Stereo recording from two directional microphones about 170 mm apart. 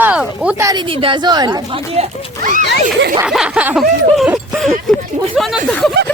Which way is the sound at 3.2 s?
5° right (ahead or behind).